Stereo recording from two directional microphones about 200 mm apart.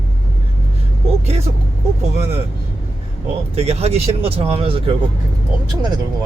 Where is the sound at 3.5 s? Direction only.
30° right (ahead or behind).